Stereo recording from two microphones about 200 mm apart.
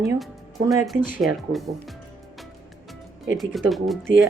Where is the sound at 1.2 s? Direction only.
Centre (ahead or behind).